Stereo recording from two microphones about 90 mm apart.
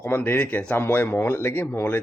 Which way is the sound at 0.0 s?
20° left (ahead or behind).